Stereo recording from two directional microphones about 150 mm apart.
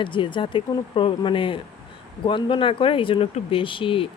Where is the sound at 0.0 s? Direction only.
35° left (ahead or behind).